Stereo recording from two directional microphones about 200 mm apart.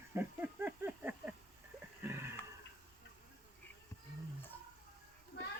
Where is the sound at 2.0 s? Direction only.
10° right (ahead or behind).